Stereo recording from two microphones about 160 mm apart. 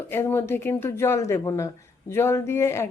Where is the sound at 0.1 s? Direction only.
15° left (ahead or behind).